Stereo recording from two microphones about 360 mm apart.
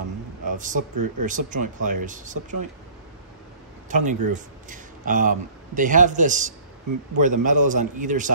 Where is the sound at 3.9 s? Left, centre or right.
Right.